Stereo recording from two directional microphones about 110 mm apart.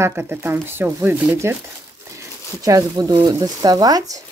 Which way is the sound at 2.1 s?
30° right (ahead or behind).